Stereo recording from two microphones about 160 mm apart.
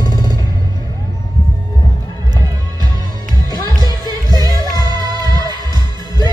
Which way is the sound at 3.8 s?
25° right (ahead or behind).